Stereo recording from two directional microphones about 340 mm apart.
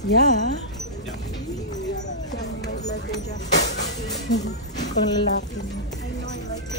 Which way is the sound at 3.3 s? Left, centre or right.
Left.